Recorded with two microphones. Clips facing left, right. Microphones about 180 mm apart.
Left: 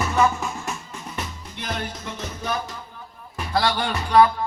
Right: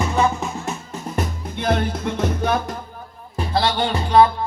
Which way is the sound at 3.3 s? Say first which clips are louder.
Right 2 dB; 30° right (ahead or behind).